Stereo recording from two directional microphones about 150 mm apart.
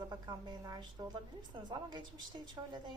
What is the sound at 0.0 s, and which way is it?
A woman's voice, 25° right (ahead or behind).